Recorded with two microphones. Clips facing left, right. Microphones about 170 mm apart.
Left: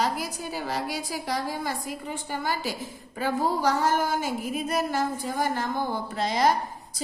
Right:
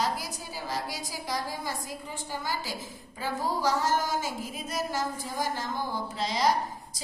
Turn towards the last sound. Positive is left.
turn(degrees=55)  # may be behind; listen again after turning